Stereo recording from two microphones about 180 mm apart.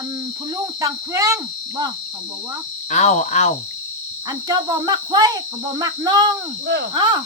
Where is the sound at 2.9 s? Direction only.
40° left (ahead or behind).